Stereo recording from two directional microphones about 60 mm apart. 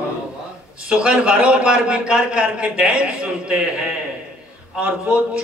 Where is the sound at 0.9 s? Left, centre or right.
Centre.